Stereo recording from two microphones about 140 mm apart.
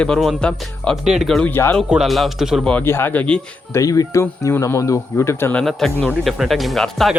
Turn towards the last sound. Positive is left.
turn(degrees=0)  # may be behind; listen again after turning